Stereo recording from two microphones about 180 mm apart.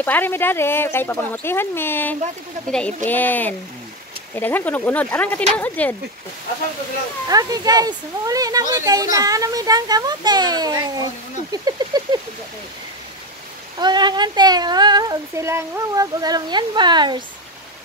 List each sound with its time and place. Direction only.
0.0 s speech: 10° left (ahead or behind)
7.2 s speech: 20° right (ahead or behind)
11.5 s a sound: 20° right (ahead or behind)
13.7 s speech: 25° right (ahead or behind)